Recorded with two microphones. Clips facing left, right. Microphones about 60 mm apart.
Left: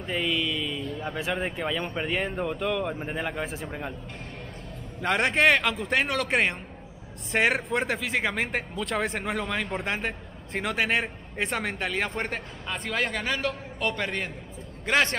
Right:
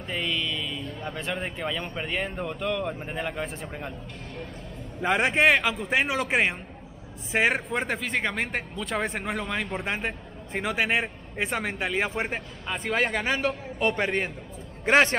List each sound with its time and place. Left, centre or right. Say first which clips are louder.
0.0 s a sound: left 2 dB; centre
0.9 s speech: left 2 dB; centre
5.0 s a man's voice: right 1 dB; centre; by 15.1 s right